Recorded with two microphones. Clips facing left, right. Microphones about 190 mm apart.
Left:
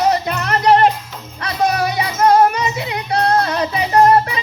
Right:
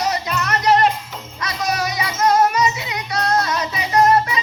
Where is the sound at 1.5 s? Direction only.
55° left (ahead or behind).